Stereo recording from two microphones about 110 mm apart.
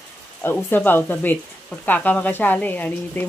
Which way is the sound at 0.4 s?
20° left (ahead or behind).